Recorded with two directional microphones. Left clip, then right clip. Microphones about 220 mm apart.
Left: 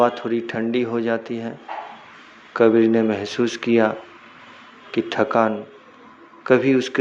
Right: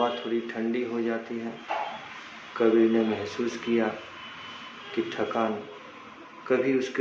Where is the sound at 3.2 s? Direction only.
40° left (ahead or behind).